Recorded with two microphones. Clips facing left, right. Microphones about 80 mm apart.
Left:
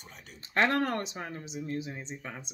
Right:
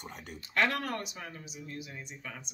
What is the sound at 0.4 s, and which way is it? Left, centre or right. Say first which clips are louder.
Speech: left 4 dB; left.